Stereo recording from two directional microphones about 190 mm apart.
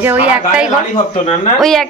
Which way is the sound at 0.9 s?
35° left (ahead or behind).